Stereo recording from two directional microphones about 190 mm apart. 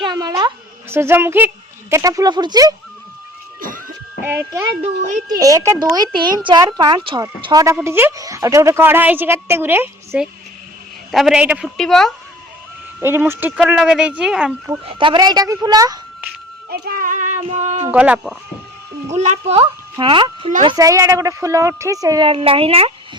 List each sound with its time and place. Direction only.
0.0 s a sound: 20° right (ahead or behind)
0.9 s a woman's voice: 15° right (ahead or behind)
3.6 s music: 45° right (ahead or behind)
4.2 s a woman's voice: 10° right (ahead or behind)
4.8 s speech: 40° right (ahead or behind)
5.4 s a woman's voice: 15° right (ahead or behind); by 12.1 s centre (ahead or behind)
13.0 s speech: 10° right (ahead or behind)
14.8 s speech: 25° right (ahead or behind)
16.6 s speech: 55° right (ahead or behind); by 17.8 s 40° right (ahead or behind)
17.9 s speech: 5° right (ahead or behind)
19.1 s a woman's voice: 35° right (ahead or behind)